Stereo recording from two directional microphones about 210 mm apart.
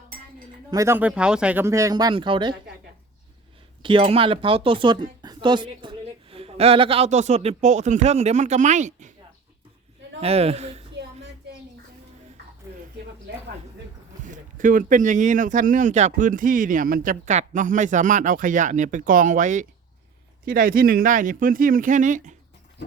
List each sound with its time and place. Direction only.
0.7 s speech: 15° right (ahead or behind)
3.8 s speech: 25° right (ahead or behind)
10.2 s speech: 30° right (ahead or behind)
14.3 s speech: 40° right (ahead or behind)